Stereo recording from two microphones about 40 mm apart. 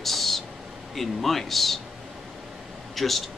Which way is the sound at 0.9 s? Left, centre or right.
Centre.